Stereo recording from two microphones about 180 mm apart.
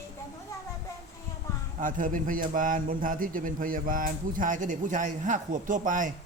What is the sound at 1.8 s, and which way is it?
A man's voice, 50° right (ahead or behind).